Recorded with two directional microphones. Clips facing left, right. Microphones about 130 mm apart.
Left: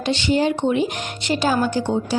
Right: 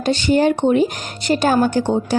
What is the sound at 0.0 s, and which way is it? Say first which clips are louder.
A woman's voice: right 4 dB; 45° right (ahead or behind).